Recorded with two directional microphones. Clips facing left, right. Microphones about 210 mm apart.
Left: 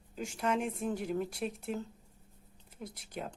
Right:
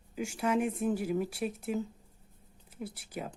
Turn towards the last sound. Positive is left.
turn(degrees=-5)  # may be behind; listen again after turning